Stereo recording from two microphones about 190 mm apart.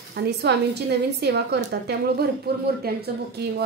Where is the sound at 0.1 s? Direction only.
65° right (ahead or behind).